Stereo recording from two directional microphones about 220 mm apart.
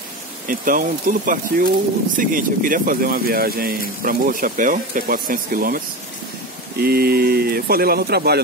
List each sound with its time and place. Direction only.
0.5 s speech: 40° right (ahead or behind)
6.8 s speech: 45° right (ahead or behind)